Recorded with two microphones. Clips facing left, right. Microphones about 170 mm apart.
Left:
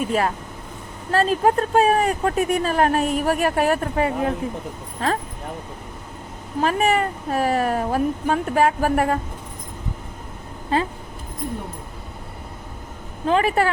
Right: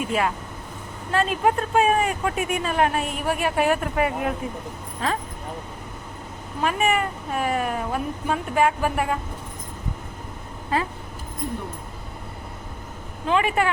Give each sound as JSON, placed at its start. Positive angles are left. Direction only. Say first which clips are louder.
{"t": 0.0, "sound": "speech", "louder": "left 2 dB", "side_deg": 40}
{"t": 6.6, "sound": "speech", "louder": "left 3 dB", "side_deg": 35}
{"t": 10.7, "sound": "speech", "louder": "left 3 dB", "side_deg": 25}
{"t": 13.2, "sound": "speech", "louder": "left 3 dB", "side_deg": 40}